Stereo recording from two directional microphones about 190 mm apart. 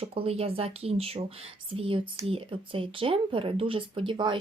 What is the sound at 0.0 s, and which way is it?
Speech, 30° right (ahead or behind).